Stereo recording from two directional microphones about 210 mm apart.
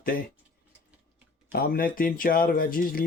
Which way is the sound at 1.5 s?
45° left (ahead or behind).